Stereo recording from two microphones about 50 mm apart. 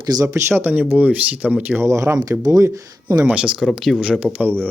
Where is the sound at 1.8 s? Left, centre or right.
Right.